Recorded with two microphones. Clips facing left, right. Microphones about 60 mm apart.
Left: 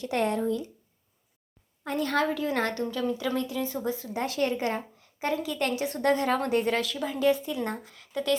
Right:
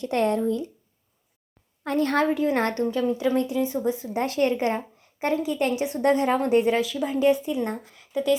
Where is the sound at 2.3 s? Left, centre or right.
Right.